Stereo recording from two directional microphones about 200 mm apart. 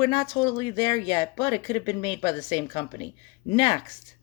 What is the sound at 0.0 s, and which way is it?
Speech, 20° left (ahead or behind).